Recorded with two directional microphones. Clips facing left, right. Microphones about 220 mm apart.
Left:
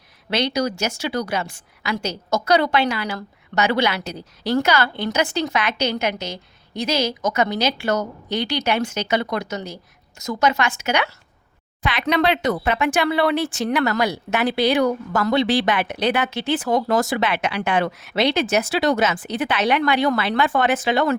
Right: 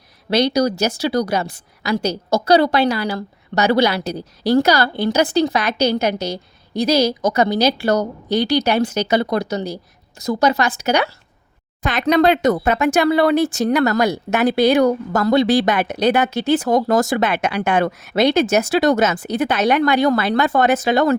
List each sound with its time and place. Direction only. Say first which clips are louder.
0.3 s a woman's voice: right 5 dB; 35° right (ahead or behind)